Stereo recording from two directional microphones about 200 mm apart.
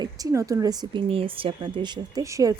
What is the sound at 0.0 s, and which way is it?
Speech, 15° right (ahead or behind).